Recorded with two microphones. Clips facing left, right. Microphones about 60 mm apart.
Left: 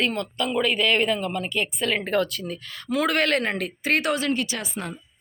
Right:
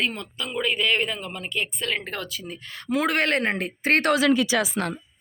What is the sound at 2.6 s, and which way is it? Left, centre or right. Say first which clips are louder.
Speech: even; right.